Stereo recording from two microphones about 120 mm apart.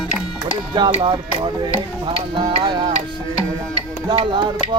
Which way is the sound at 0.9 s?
45° right (ahead or behind).